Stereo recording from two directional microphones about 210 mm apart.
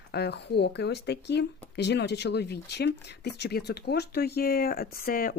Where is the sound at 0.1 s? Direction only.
50° left (ahead or behind).